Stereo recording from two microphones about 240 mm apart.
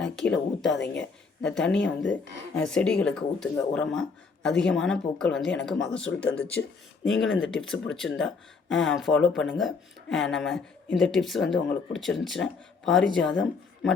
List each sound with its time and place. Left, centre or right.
0.0 s a woman's voice: centre
7.2 s speech: left
7.4 s speech: centre